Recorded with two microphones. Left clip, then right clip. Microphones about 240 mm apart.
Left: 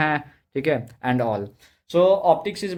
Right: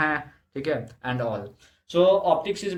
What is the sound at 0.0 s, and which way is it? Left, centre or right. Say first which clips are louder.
Speech: left 2 dB; left.